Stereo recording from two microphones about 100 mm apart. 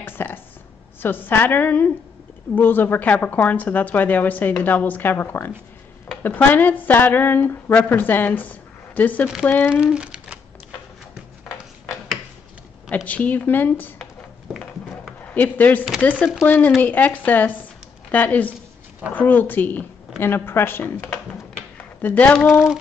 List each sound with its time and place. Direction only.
0.0 s a sound: 20° left (ahead or behind)
1.0 s a woman's voice: 20° left (ahead or behind)
9.7 s a sound: 10° right (ahead or behind)
12.9 s a woman's voice: 15° left (ahead or behind)
15.3 s a woman's voice: 15° left (ahead or behind)
22.5 s female singing: 5° right (ahead or behind)